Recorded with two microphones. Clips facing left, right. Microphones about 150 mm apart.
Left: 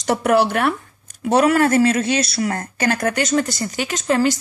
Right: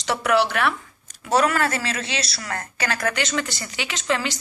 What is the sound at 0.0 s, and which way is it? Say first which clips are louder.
Speech: left 4 dB; 50° left (ahead or behind).